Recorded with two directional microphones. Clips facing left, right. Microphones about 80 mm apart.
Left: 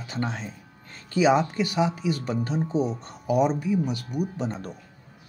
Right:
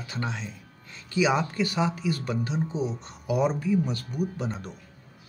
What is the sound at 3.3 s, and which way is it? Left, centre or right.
Speech, centre.